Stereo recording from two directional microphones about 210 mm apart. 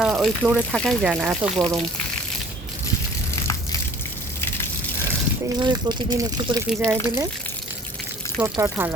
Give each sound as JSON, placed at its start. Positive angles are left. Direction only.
{"t": 0.0, "sound": "speech", "side_deg": 0}
{"t": 5.5, "sound": "speech", "side_deg": -20}
{"t": 8.4, "sound": "speech", "side_deg": -10}